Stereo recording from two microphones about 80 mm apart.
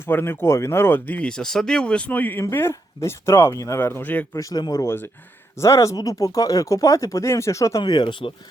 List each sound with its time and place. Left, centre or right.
0.1 s speech: left
1.3 s speech: centre; by 3.5 s left
3.5 s speech: left
3.8 s speech: left
4.4 s speech: left
7.8 s speech: left